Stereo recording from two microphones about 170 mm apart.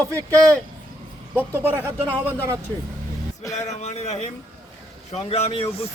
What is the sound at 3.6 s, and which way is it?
Speech, 40° left (ahead or behind).